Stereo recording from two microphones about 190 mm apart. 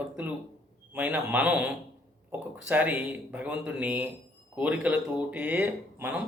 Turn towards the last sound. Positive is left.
turn(degrees=-10)  # may be behind; listen again after turning